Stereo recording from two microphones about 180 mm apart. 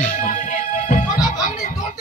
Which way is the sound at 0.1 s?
45° left (ahead or behind).